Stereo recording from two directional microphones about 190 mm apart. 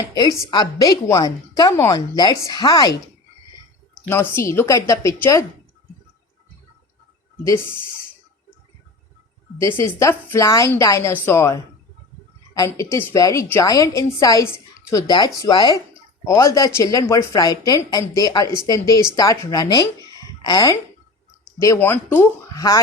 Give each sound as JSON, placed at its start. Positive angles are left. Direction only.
{"t": 0.1, "sound": "a woman's voice", "side_deg": 20}
{"t": 4.1, "sound": "a woman's voice", "side_deg": 10}
{"t": 7.4, "sound": "a woman's voice", "side_deg": 15}
{"t": 9.6, "sound": "a woman's voice", "side_deg": 15}
{"t": 20.1, "sound": "a sound", "side_deg": 20}
{"t": 21.6, "sound": "a woman's voice", "side_deg": 15}